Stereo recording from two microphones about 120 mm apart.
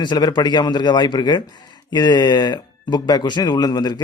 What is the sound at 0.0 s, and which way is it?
A man's voice, 35° left (ahead or behind).